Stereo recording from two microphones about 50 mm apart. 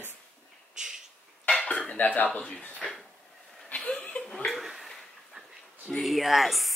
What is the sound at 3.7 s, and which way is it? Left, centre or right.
Chuckle, centre.